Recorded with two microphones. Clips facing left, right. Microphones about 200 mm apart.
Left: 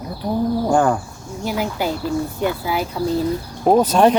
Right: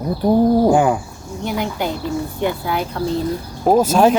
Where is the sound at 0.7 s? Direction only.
10° right (ahead or behind).